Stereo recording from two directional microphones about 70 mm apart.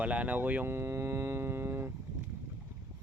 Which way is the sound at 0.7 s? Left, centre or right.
Right.